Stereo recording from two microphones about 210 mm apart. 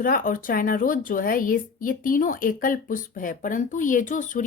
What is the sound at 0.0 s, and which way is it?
Speech, 40° left (ahead or behind).